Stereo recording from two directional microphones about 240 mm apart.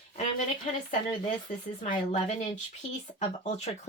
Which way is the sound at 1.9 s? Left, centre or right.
Left.